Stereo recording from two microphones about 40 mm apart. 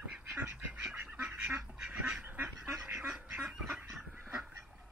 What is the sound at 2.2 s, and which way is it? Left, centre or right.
Goose, right.